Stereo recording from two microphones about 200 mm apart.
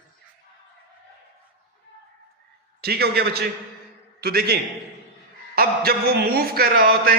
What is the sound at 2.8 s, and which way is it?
Speech, 55° right (ahead or behind).